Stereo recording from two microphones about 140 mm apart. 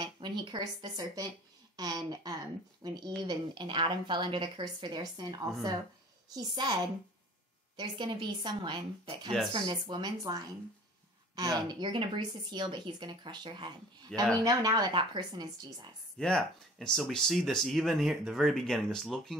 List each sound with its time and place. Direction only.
0.0 s a woman's voice: 30° right (ahead or behind)
16.2 s speech: 5° left (ahead or behind)